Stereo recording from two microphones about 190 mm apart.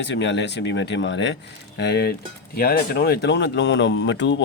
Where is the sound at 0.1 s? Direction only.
70° left (ahead or behind).